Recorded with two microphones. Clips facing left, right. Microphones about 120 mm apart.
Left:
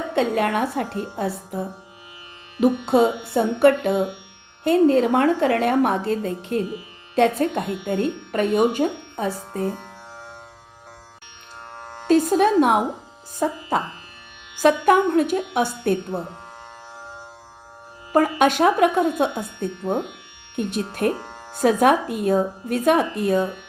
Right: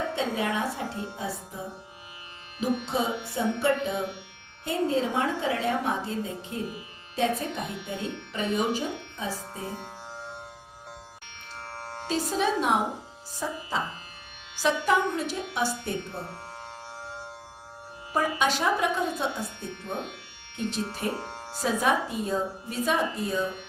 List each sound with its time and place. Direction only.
0.1 s a woman's voice: 60° left (ahead or behind)
12.0 s a woman's voice: 55° left (ahead or behind)
18.1 s a woman's voice: 55° left (ahead or behind)